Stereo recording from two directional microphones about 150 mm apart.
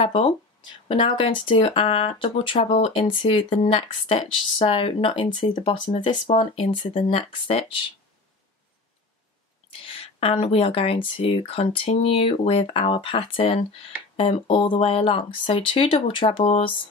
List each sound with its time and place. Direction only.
0.0 s speech: 35° left (ahead or behind)
9.8 s speech: 40° left (ahead or behind)